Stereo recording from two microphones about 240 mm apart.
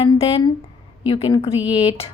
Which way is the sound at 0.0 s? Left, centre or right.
Left.